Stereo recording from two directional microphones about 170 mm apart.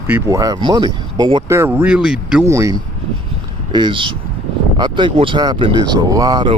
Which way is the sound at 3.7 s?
30° right (ahead or behind).